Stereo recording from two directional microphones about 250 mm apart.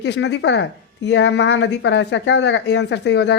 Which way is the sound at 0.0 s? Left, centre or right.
Left.